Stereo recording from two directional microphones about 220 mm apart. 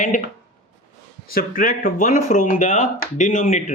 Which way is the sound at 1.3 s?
40° left (ahead or behind).